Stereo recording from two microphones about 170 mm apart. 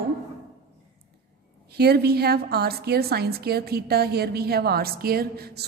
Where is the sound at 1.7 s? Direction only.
70° right (ahead or behind).